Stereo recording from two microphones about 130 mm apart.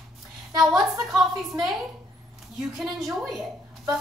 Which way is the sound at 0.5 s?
Centre (ahead or behind).